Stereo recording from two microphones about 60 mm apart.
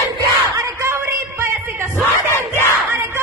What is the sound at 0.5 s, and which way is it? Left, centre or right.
Music, right.